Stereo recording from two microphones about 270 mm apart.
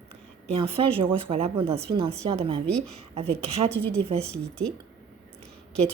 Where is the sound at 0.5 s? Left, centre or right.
Right.